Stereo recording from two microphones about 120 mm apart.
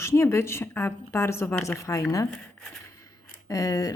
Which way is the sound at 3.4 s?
30° left (ahead or behind).